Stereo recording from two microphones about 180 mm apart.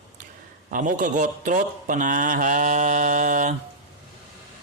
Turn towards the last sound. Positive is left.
turn(degrees=-45)  # may be behind; listen again after turning